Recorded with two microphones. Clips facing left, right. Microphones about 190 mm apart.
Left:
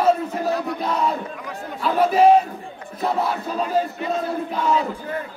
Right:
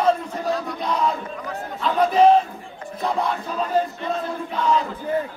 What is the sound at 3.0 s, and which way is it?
Speech, 5° left (ahead or behind).